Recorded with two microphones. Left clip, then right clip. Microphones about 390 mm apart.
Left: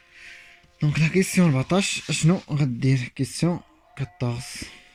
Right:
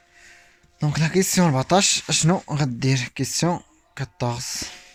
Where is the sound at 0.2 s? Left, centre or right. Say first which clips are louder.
Left 5 dB; centre.